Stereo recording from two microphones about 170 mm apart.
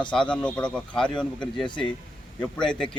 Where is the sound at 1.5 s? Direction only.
30° left (ahead or behind).